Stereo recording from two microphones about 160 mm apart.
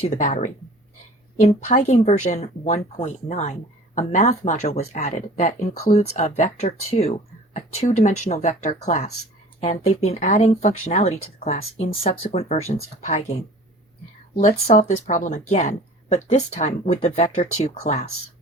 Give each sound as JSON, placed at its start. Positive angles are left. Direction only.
{"t": 0.0, "sound": "speech", "side_deg": 50}
{"t": 14.7, "sound": "speech", "side_deg": 45}